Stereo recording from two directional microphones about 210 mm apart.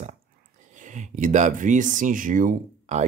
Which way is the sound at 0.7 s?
35° right (ahead or behind).